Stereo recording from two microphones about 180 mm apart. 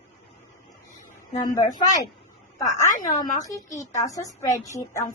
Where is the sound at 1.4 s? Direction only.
20° left (ahead or behind).